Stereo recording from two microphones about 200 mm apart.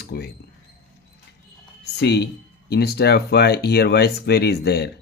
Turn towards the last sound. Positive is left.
turn(degrees=55)  # may be behind; listen again after turning